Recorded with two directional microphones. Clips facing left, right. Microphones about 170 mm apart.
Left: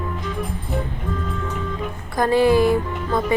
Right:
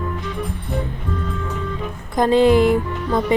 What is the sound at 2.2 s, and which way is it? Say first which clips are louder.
Speech: right 2 dB; 20° right (ahead or behind).